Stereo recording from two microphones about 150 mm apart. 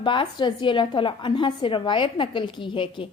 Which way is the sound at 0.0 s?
30° left (ahead or behind).